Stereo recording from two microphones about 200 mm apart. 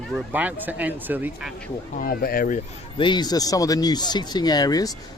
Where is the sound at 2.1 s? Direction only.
50° left (ahead or behind).